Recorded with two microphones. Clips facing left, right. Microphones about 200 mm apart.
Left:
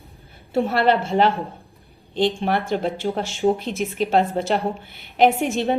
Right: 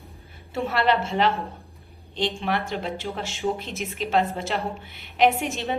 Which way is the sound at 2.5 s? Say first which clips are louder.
Left 5 dB; 45° left (ahead or behind).